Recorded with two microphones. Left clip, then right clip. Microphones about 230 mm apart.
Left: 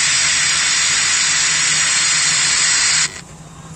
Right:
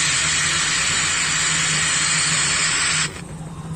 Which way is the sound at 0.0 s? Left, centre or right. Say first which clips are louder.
Left 4 dB; left.